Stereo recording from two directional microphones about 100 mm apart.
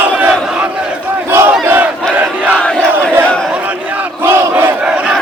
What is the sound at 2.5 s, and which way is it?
Battle cry, 10° left (ahead or behind).